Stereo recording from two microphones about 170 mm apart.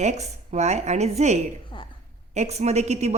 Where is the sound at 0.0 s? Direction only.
40° right (ahead or behind).